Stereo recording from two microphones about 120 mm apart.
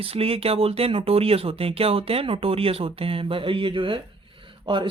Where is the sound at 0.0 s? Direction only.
50° right (ahead or behind).